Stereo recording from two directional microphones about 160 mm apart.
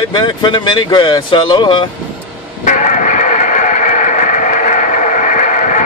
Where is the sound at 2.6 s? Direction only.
50° left (ahead or behind).